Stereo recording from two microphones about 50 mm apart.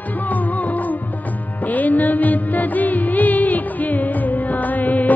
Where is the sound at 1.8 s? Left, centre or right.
Left.